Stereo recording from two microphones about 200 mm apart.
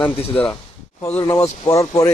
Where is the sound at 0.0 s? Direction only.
10° left (ahead or behind).